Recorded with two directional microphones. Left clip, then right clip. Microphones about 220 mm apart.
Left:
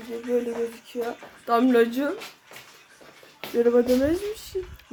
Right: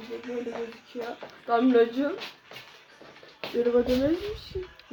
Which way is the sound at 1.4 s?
55° left (ahead or behind).